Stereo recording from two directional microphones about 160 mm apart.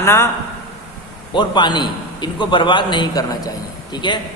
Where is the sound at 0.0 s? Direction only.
15° left (ahead or behind).